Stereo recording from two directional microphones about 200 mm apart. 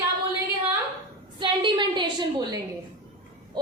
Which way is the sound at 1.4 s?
25° right (ahead or behind).